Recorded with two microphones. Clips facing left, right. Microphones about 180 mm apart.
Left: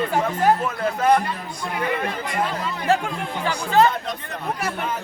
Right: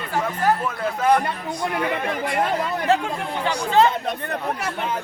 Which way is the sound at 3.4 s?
25° right (ahead or behind).